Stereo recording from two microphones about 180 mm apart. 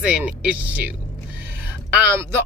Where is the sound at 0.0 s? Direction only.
5° right (ahead or behind).